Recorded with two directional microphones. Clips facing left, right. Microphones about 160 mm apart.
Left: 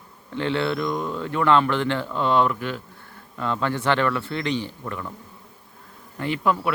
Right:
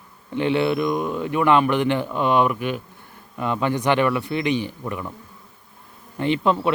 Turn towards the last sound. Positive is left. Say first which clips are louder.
# right 3 dB
turn(degrees=-25)  # may be behind; listen again after turning